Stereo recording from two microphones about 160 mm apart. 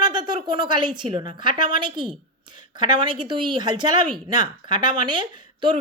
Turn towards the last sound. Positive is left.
turn(degrees=-30)  # may be behind; listen again after turning